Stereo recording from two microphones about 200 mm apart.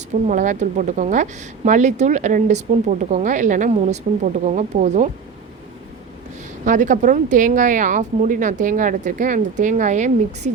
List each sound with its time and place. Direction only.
0.3 s a woman's voice: 40° right (ahead or behind)
6.7 s a woman's voice: 40° right (ahead or behind)